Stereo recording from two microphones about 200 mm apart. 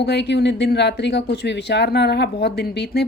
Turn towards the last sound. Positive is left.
turn(degrees=50)  # may be behind; listen again after turning